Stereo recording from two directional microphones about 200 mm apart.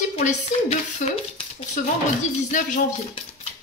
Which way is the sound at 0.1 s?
35° left (ahead or behind).